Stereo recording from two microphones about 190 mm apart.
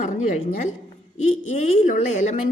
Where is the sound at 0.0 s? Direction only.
40° left (ahead or behind).